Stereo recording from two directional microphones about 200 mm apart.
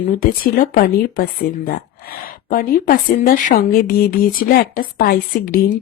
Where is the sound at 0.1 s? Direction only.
45° left (ahead or behind).